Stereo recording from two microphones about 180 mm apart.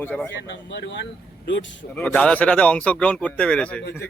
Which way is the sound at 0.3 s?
85° left.